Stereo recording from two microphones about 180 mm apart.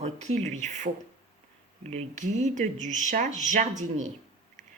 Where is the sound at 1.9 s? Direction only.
40° right (ahead or behind).